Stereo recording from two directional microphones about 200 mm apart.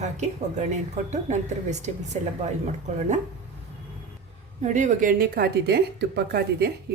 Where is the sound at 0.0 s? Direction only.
35° right (ahead or behind).